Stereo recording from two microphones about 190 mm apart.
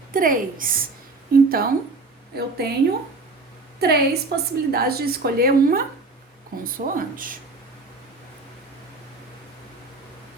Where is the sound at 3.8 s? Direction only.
55° right (ahead or behind).